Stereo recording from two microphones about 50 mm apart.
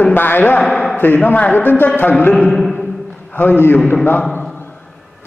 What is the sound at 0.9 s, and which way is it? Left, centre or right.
Speech, left.